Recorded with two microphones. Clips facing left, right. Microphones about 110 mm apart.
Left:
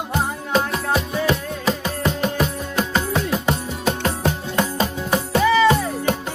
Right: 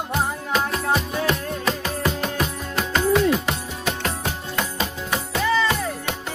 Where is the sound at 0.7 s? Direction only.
Centre (ahead or behind).